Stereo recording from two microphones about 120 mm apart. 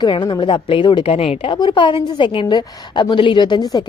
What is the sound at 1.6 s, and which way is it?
A woman's voice, 40° left (ahead or behind).